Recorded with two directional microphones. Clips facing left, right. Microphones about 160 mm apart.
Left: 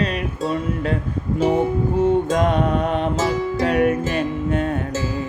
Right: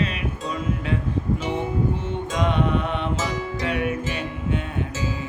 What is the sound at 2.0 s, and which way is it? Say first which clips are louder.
Music: left 9 dB; 45° left (ahead or behind).